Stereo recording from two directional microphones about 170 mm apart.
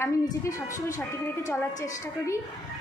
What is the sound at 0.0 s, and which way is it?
A woman's voice, 20° left (ahead or behind).